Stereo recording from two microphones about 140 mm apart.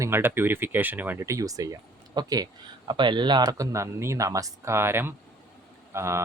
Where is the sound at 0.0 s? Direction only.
15° right (ahead or behind).